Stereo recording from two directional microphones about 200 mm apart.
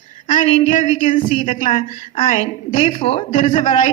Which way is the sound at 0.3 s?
35° left (ahead or behind).